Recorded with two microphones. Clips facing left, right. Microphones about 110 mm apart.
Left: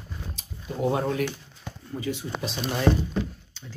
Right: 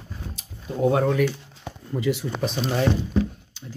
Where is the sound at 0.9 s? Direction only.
55° right (ahead or behind).